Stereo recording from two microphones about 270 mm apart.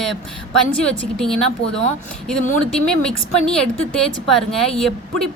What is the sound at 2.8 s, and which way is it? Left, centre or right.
Speech, centre.